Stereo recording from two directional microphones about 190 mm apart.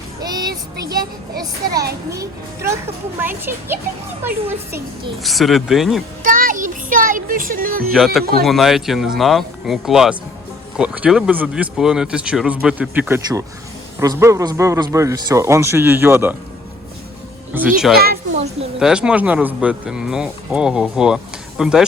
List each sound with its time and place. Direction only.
0.2 s child singing: 20° right (ahead or behind)
2.1 s a man's voice: 15° right (ahead or behind)
5.2 s speech: centre (ahead or behind)
6.2 s a child's voice: 45° right (ahead or behind)
7.9 s a man's voice: centre (ahead or behind)
17.7 s speech: centre (ahead or behind)